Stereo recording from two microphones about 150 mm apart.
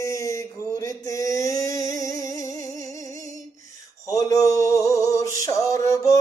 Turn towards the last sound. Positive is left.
turn(degrees=20)  # may be behind; listen again after turning